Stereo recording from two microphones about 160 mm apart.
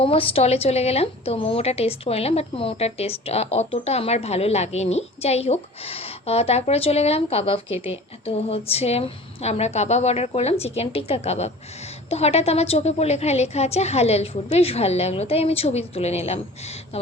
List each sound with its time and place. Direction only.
0.0 s a woman's voice: 35° left (ahead or behind)